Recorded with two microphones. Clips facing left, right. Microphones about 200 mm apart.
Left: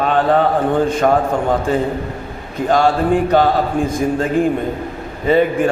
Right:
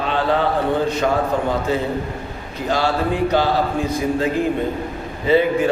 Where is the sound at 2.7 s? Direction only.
50° left (ahead or behind).